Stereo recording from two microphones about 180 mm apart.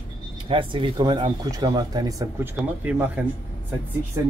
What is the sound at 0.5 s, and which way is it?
Speech, 30° right (ahead or behind).